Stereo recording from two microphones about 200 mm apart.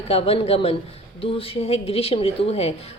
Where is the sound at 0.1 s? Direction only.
30° left (ahead or behind).